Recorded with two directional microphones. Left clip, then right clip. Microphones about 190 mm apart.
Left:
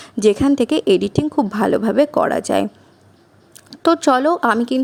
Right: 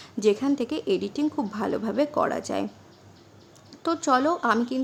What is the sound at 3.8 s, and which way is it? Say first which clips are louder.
Speech: left 9 dB; 40° left (ahead or behind).